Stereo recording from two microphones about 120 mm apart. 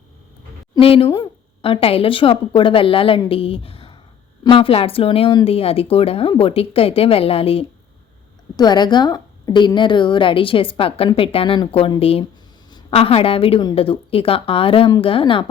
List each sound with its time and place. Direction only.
0.8 s a woman's voice: 50° left (ahead or behind)
1.0 s speech: 25° left (ahead or behind)
1.6 s a woman's voice: 50° left (ahead or behind)
8.5 s a woman's voice: 35° left (ahead or behind)